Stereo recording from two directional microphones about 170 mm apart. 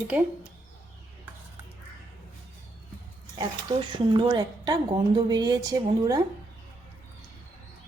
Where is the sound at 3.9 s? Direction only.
25° right (ahead or behind).